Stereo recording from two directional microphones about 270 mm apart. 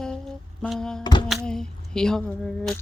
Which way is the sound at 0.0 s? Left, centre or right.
Centre.